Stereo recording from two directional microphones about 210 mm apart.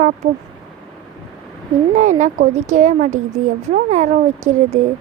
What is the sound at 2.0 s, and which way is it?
Speech, 35° right (ahead or behind).